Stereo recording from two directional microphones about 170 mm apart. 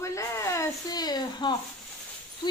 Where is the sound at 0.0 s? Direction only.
15° left (ahead or behind).